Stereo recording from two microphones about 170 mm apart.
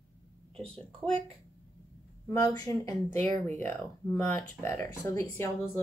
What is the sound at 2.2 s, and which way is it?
Speech, 20° left (ahead or behind).